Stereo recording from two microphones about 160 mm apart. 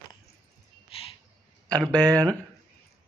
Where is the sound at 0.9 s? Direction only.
35° left (ahead or behind).